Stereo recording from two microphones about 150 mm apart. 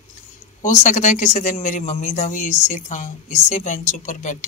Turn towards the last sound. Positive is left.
turn(degrees=55)  # may be behind; listen again after turning